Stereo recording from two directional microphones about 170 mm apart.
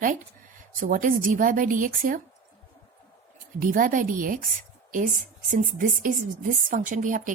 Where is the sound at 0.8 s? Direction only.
50° right (ahead or behind).